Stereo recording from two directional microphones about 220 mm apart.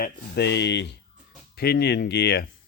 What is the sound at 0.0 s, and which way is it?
Speech, 50° left (ahead or behind).